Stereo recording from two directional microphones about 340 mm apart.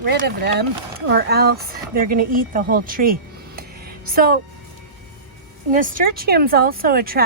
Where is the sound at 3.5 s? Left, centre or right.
Right.